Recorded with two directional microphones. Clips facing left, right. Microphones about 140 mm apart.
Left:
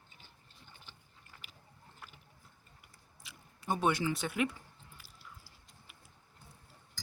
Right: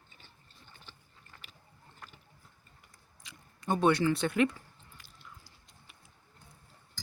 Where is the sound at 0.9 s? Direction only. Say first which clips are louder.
Right 2 dB; 15° left (ahead or behind).